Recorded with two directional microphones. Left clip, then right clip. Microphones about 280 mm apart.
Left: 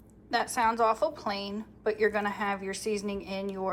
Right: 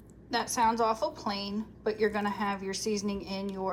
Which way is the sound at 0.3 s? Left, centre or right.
Centre.